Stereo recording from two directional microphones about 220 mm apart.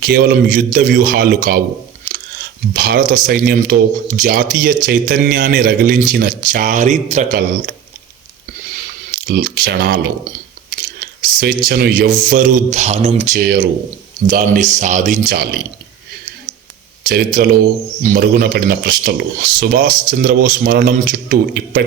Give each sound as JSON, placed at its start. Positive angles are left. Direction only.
{"t": 0.0, "sound": "speech", "side_deg": -45}
{"t": 2.7, "sound": "speech", "side_deg": -40}
{"t": 9.1, "sound": "speech", "side_deg": -45}
{"t": 11.3, "sound": "speech", "side_deg": -45}
{"t": 17.1, "sound": "speech", "side_deg": -45}